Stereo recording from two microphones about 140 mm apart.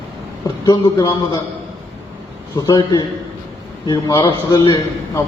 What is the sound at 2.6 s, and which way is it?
A man's voice, 25° left (ahead or behind).